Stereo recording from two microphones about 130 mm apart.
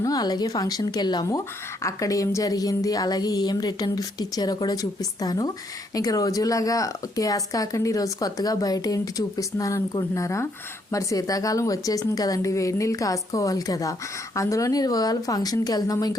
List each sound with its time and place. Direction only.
0.0 s a woman's voice: 30° left (ahead or behind)